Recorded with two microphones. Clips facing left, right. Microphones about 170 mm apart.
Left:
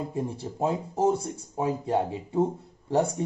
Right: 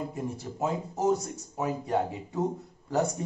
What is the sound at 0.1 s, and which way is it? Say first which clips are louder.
Speech: left 3 dB; 30° left (ahead or behind).